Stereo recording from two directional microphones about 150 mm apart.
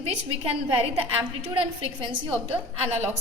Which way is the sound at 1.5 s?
35° right (ahead or behind).